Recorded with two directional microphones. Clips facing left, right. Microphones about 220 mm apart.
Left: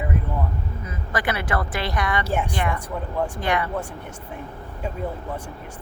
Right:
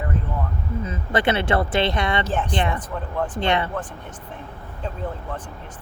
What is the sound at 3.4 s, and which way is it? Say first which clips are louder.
Speech: right 3 dB; 25° right (ahead or behind).